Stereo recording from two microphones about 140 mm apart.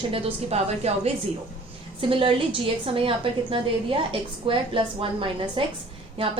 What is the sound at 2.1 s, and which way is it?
A woman's voice, 40° right (ahead or behind).